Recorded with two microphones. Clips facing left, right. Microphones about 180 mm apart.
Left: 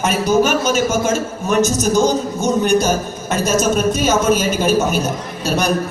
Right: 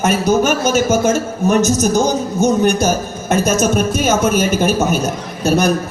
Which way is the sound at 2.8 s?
45° right (ahead or behind).